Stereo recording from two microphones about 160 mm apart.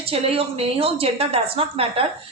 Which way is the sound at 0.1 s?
35° right (ahead or behind).